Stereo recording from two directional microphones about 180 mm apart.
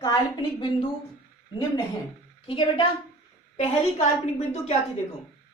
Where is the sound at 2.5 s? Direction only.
30° left (ahead or behind).